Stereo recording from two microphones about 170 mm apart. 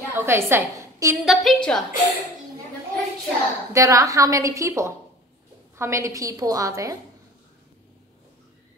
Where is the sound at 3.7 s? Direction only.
20° right (ahead or behind).